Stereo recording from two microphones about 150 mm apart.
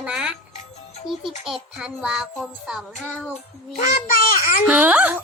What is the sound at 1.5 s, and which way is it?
A child's voice, 5° right (ahead or behind).